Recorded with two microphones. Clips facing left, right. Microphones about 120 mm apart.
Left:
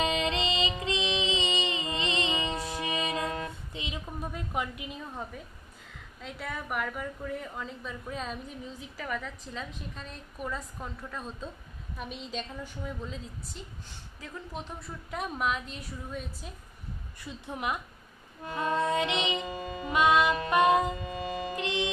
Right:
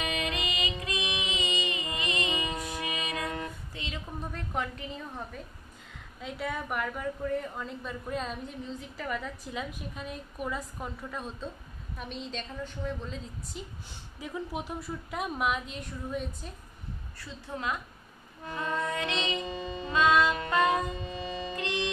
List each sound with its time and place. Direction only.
0.0 s music: 30° left (ahead or behind); by 5.2 s 10° left (ahead or behind)
6.2 s a woman's voice: centre (ahead or behind)
9.2 s a woman's voice: 10° right (ahead or behind)
14.2 s a woman's voice: 15° right (ahead or behind)
14.8 s a woman's voice: centre (ahead or behind)
17.2 s a woman's voice: 15° left (ahead or behind)
18.5 s music: 20° left (ahead or behind)
21.0 s music: 55° left (ahead or behind)
21.5 s music: 20° left (ahead or behind)